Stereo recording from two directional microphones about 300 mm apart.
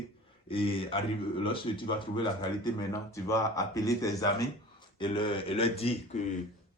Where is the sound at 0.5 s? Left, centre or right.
Centre.